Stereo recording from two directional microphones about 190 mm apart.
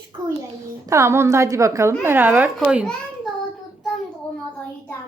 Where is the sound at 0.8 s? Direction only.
15° right (ahead or behind).